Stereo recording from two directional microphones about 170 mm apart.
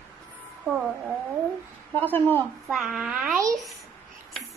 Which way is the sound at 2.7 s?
Centre (ahead or behind).